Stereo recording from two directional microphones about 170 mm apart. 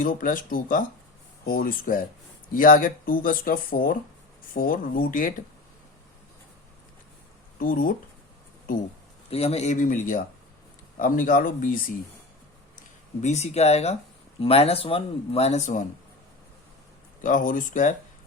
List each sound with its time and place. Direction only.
0.0 s speech: 55° left (ahead or behind)
7.6 s speech: 55° left (ahead or behind)
9.3 s speech: 35° left (ahead or behind); by 11.9 s 55° left (ahead or behind)
13.2 s speech: 40° left (ahead or behind)
17.2 s speech: 50° left (ahead or behind)